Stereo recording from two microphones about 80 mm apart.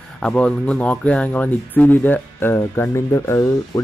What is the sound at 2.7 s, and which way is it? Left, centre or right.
Speech, left.